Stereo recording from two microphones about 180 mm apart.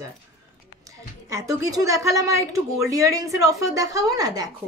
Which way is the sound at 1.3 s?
20° right (ahead or behind).